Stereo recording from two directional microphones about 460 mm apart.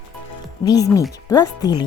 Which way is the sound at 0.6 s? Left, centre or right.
Centre.